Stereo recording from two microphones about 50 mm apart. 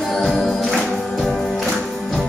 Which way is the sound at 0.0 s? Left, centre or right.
Centre.